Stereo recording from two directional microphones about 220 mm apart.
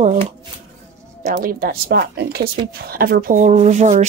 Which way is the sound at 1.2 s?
35° right (ahead or behind).